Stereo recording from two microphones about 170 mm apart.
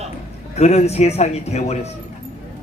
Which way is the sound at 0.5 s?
40° left (ahead or behind).